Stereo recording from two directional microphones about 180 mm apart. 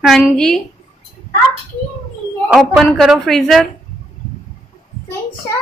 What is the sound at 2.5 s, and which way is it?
A woman's voice, centre (ahead or behind).